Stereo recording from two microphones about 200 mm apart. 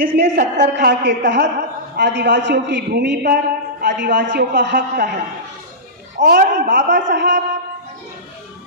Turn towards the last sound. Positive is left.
turn(degrees=-60)  # may be behind; listen again after turning